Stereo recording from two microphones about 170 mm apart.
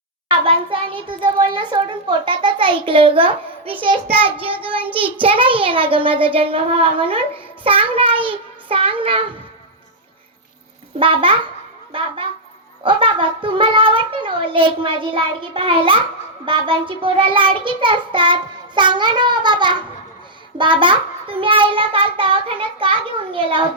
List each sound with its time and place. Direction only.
0.3 s a child's voice: 30° right (ahead or behind)
4.9 s child singing: 10° right (ahead or behind)
5.2 s a child's voice: 30° right (ahead or behind)
11.0 s a child's voice: 30° right (ahead or behind)
12.8 s child singing: 30° right (ahead or behind)
20.6 s a child's voice: 30° right (ahead or behind)